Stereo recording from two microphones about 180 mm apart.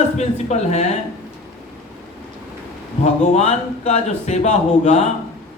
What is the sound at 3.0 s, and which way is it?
A man's voice, 40° left (ahead or behind).